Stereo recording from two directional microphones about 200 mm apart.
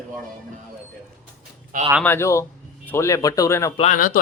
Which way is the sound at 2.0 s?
10° left (ahead or behind).